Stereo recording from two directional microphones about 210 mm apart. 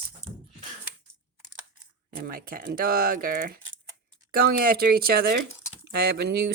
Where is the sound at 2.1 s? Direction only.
45° right (ahead or behind).